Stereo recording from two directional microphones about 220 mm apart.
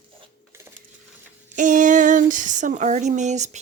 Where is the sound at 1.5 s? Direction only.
35° right (ahead or behind).